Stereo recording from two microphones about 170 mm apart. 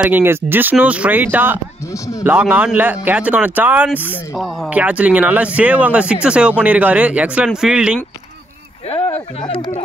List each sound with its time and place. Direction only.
0.0 s speech: 10° right (ahead or behind)
8.9 s speech: 35° left (ahead or behind)